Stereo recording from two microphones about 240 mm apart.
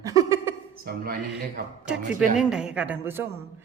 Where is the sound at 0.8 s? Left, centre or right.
Right.